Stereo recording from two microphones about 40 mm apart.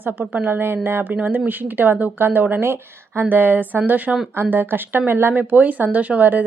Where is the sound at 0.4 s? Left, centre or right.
Right.